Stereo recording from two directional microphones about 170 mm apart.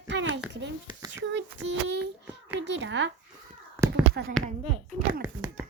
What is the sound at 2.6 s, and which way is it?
Speech, 90° right.